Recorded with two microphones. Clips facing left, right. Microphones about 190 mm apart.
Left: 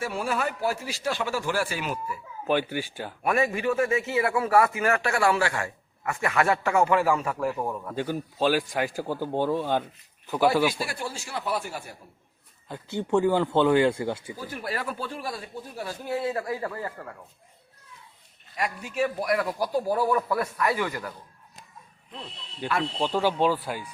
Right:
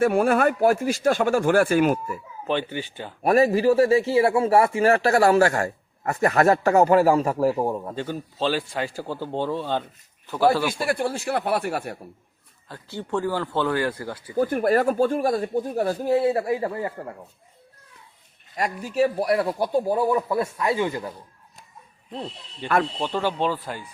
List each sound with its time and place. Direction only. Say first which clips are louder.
0.0 s speech: right 10 dB; 55° right (ahead or behind)
2.5 s speech: even; 10° left (ahead or behind)
3.2 s speech: right 7 dB; 35° right (ahead or behind)
7.9 s speech: left 1 dB; 10° left (ahead or behind)
10.8 s speech: right 8 dB; 55° right (ahead or behind)
12.6 s speech: left 3 dB; 20° left (ahead or behind)
14.3 s speech: right 13 dB; 55° right (ahead or behind); by 17.2 s 25° right (ahead or behind)
18.5 s speech: right 5 dB; 40° right (ahead or behind)
23.0 s speech: left 1 dB; 10° left (ahead or behind)